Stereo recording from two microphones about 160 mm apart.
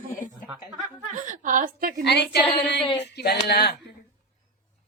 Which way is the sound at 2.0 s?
90° left.